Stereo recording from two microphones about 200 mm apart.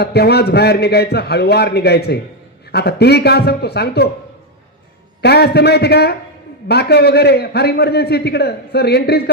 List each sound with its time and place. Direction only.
0.0 s a man's voice: 55° left (ahead or behind)
5.2 s a man's voice: 55° left (ahead or behind)